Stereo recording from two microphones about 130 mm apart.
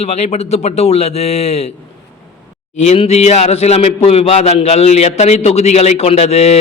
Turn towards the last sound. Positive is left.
turn(degrees=55)  # may be behind; listen again after turning